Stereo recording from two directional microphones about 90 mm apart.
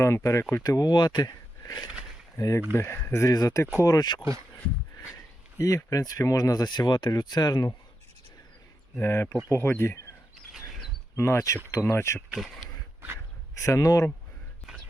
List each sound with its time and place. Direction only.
0.0 s speech: 30° left (ahead or behind)
0.5 s speech: 40° left (ahead or behind)
2.3 s speech: 35° left (ahead or behind); by 4.3 s 55° left (ahead or behind)
5.5 s speech: 40° left (ahead or behind)
9.0 s speech: 25° left (ahead or behind)
10.3 s a sound: centre (ahead or behind)
11.2 s speech: 35° left (ahead or behind)
12.3 s speech: centre (ahead or behind)
13.6 s speech: 35° left (ahead or behind)
14.6 s whispering: centre (ahead or behind)